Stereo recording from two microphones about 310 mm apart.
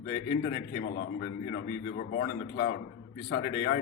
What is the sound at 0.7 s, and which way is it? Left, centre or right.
A man's voice, left.